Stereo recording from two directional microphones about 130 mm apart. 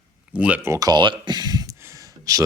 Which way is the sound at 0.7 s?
30° right (ahead or behind).